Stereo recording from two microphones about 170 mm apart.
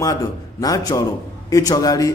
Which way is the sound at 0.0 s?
20° left (ahead or behind).